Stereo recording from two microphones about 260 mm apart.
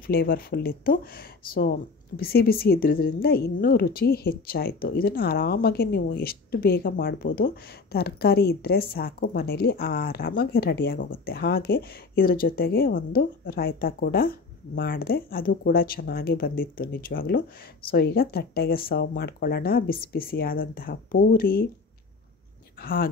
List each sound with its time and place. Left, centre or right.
0.0 s speech: left
22.8 s speech: left